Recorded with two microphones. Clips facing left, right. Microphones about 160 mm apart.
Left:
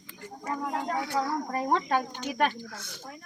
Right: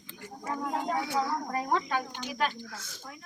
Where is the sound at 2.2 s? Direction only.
55° left (ahead or behind).